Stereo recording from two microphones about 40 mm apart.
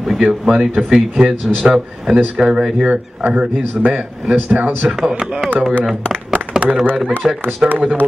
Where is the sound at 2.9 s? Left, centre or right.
Right.